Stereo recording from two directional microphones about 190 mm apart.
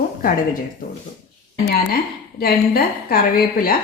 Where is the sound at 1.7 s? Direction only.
50° left (ahead or behind).